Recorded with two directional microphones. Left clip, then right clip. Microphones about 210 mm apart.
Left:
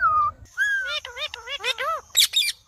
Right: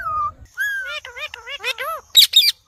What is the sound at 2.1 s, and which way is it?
Bird, 50° right (ahead or behind).